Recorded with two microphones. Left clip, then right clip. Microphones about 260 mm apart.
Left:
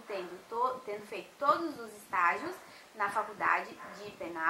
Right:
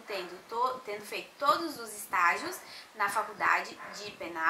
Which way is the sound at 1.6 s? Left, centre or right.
Centre.